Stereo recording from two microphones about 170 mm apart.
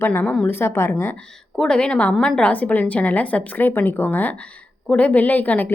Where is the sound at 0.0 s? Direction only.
10° left (ahead or behind).